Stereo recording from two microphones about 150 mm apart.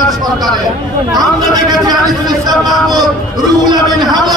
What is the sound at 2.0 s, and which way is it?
Speech, centre (ahead or behind).